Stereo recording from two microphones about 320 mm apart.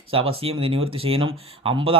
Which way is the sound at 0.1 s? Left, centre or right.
Centre.